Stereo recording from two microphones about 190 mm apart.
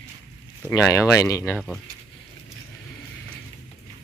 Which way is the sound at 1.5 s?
Centre (ahead or behind).